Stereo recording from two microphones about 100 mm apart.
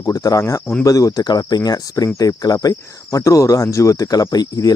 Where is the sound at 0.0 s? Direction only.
35° left (ahead or behind).